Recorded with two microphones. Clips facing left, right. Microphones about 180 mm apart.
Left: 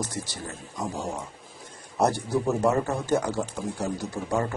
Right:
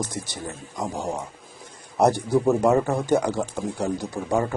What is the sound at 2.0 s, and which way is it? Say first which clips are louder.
Speech: right 5 dB; 15° right (ahead or behind).